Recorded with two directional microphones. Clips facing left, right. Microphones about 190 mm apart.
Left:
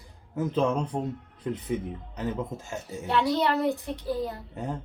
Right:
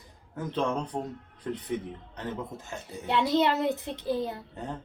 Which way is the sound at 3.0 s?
20° right (ahead or behind).